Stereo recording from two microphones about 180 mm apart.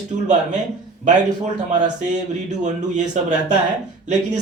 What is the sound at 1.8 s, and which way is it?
A man's voice, 40° right (ahead or behind).